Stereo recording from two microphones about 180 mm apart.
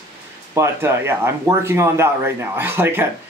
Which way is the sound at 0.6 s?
15° right (ahead or behind).